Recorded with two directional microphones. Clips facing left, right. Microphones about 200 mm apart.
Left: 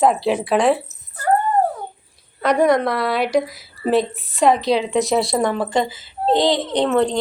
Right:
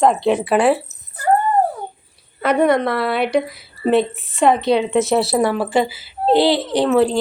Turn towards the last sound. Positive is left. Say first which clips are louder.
# right 2 dB
turn(degrees=-5)  # may be behind; listen again after turning